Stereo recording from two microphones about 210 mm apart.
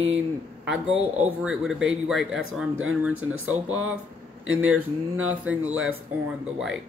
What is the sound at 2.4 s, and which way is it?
Speech, 70° right (ahead or behind).